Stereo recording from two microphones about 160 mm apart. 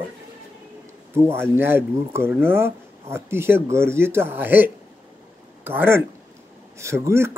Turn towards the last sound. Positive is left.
turn(degrees=-15)  # may be behind; listen again after turning